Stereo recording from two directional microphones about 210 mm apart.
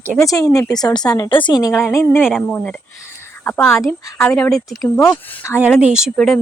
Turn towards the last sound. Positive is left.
turn(degrees=0)  # may be behind; listen again after turning